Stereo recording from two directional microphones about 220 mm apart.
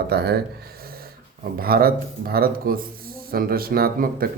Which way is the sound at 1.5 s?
45° right (ahead or behind).